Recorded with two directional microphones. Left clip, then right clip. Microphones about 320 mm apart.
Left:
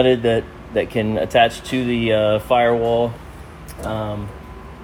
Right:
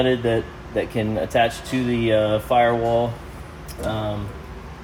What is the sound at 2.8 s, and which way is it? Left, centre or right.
Speech, left.